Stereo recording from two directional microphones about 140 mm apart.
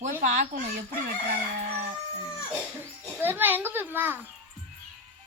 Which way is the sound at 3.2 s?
15° right (ahead or behind).